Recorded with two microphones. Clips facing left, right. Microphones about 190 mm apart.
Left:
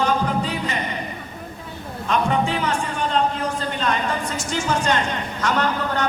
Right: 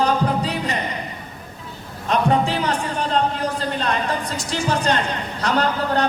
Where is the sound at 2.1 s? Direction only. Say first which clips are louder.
Right 2 dB; 35° right (ahead or behind).